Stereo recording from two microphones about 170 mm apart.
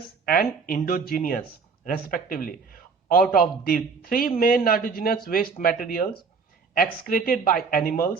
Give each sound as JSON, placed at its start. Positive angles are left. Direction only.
{"t": 0.3, "sound": "speech", "side_deg": 60}
{"t": 7.1, "sound": "speech", "side_deg": 55}